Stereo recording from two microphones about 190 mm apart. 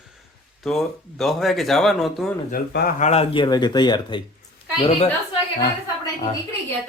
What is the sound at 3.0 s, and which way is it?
Speech, 35° left (ahead or behind).